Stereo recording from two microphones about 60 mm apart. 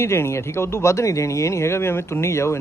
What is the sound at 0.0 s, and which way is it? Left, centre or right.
Speech, left.